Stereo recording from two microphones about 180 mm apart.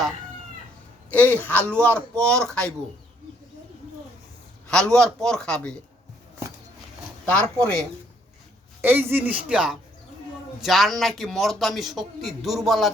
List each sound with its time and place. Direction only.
1.1 s speech: 10° left (ahead or behind)
4.7 s a man's voice: 5° left (ahead or behind)
7.3 s a man's voice: 5° left (ahead or behind)
8.8 s a man's voice: 10° right (ahead or behind)